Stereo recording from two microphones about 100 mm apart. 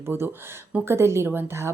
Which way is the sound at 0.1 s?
20° right (ahead or behind).